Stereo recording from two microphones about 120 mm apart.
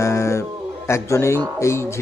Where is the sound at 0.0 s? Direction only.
25° left (ahead or behind).